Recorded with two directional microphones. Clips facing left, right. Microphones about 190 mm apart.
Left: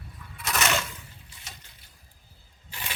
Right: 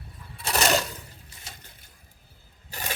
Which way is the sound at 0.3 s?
35° right (ahead or behind).